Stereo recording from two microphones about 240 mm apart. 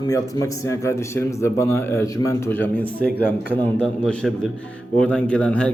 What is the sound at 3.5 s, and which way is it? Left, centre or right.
Speech, centre.